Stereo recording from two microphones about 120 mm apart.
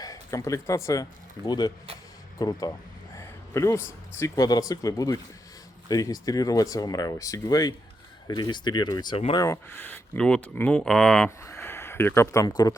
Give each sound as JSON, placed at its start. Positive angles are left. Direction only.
{"t": 0.0, "sound": "speech", "side_deg": 30}
{"t": 3.2, "sound": "a sound", "side_deg": 25}
{"t": 4.2, "sound": "speech", "side_deg": 30}
{"t": 9.3, "sound": "speech", "side_deg": 25}
{"t": 11.3, "sound": "speech", "side_deg": 25}